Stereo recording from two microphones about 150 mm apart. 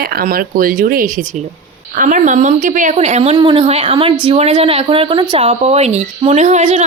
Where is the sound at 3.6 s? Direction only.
40° right (ahead or behind).